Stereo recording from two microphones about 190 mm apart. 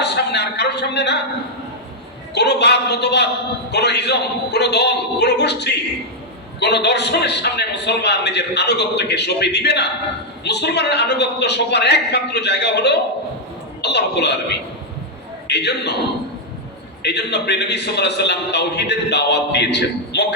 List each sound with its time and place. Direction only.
0.0 s a sound: 60° left (ahead or behind)
2.3 s a man's voice: 60° left (ahead or behind)
15.4 s a man's voice: 65° left (ahead or behind)
17.0 s a man's voice: 60° left (ahead or behind)